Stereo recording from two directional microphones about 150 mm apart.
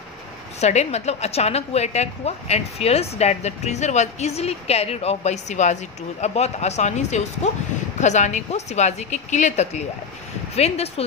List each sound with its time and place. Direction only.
0.6 s a woman's voice: 50° left (ahead or behind)